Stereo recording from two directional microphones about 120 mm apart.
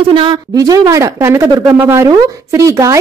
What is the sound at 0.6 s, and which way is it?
A woman's voice, 30° right (ahead or behind).